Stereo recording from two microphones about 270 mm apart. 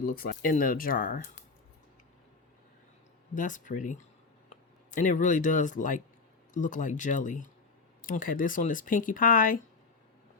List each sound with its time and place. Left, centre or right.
0.0 s speech: left
3.3 s speech: left